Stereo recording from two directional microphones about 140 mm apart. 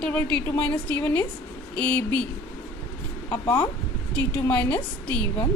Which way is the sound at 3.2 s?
15° left (ahead or behind).